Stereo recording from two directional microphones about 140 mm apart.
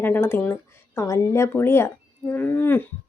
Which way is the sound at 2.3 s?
15° left (ahead or behind).